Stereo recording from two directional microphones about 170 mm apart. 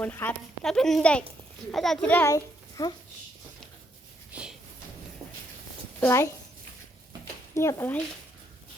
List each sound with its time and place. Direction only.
0.0 s a child's voice: 10° left (ahead or behind)
4.3 s a sound: 5° right (ahead or behind)
6.0 s speech: 15° left (ahead or behind)
7.5 s speech: 15° left (ahead or behind)